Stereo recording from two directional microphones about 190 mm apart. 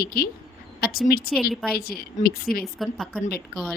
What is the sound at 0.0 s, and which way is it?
A woman's voice, 50° left (ahead or behind).